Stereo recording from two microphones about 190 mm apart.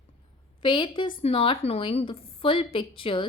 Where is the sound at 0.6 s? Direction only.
25° left (ahead or behind).